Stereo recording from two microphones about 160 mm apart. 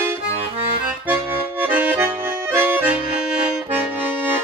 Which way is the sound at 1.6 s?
10° right (ahead or behind).